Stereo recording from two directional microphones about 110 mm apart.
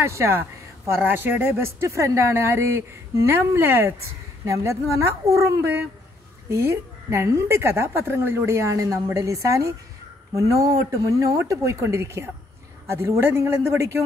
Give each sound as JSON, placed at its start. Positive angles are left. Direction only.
{"t": 0.0, "sound": "speech", "side_deg": -25}